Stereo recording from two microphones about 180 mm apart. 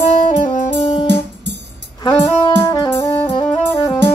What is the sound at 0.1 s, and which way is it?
Saxophone, 45° left (ahead or behind).